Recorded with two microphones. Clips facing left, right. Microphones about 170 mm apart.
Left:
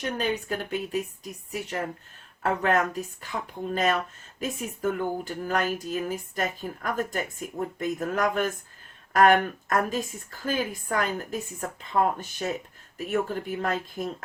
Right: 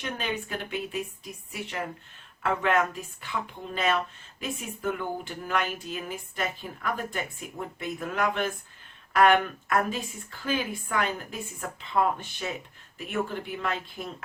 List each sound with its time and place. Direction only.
0.0 s speech: 40° left (ahead or behind)
4.4 s speech: 40° left (ahead or behind)